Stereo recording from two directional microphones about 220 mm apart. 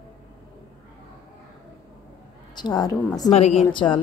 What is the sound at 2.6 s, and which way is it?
Speech, 20° left (ahead or behind).